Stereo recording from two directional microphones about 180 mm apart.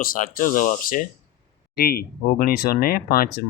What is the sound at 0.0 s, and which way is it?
Speech, 50° left (ahead or behind).